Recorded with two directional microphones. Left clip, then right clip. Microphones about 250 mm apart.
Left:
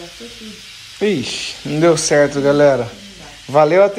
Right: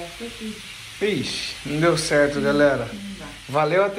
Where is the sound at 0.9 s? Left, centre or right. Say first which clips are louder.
Left 6 dB; left.